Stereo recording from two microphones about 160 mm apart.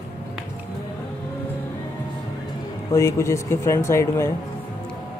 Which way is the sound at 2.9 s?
20° left (ahead or behind).